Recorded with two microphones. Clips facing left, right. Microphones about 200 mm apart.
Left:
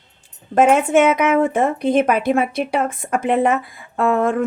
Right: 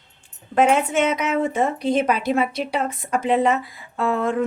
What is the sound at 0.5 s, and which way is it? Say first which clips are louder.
Speech: left 4 dB; 50° left (ahead or behind).